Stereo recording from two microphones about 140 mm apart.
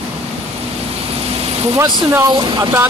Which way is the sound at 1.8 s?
35° right (ahead or behind).